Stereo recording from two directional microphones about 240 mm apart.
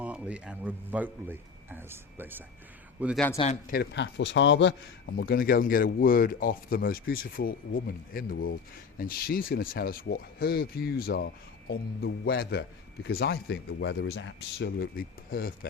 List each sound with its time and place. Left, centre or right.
0.0 s a man's voice: centre
3.3 s speech: left
3.8 s speech: left
5.1 s speech: left